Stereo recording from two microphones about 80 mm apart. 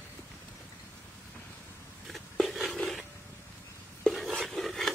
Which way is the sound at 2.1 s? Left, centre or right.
Centre.